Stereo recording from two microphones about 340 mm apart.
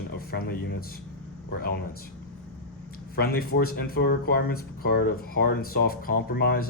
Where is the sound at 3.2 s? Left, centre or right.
Left.